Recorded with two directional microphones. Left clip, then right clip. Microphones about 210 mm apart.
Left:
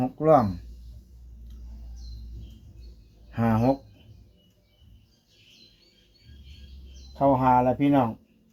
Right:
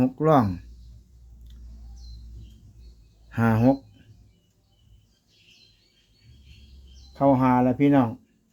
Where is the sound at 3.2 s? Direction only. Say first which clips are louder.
Right 2 dB; 55° right (ahead or behind).